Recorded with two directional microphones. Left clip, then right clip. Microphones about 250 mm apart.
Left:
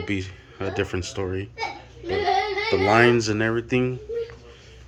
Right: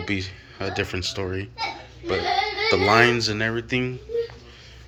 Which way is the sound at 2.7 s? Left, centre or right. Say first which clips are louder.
Even; centre.